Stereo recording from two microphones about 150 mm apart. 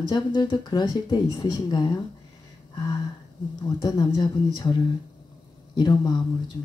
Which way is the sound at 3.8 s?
30° left (ahead or behind).